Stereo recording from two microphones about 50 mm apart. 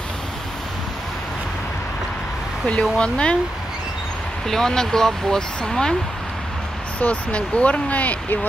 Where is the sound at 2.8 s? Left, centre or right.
Left.